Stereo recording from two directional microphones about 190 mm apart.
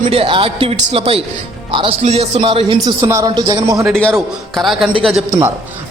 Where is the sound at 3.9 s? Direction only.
5° left (ahead or behind).